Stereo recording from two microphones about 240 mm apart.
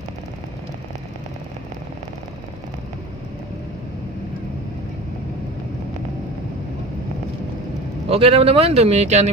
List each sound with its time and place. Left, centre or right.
8.1 s speech: right